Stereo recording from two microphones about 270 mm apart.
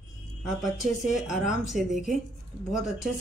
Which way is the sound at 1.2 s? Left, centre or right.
Left.